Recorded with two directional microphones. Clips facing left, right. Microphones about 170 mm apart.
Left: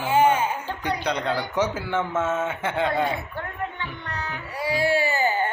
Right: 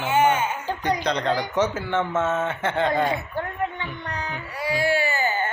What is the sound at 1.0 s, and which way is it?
A man's voice, 10° left (ahead or behind).